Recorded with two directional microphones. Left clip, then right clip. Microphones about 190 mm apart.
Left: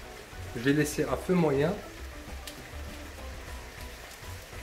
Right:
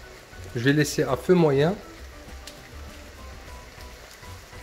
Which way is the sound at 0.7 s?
50° right (ahead or behind).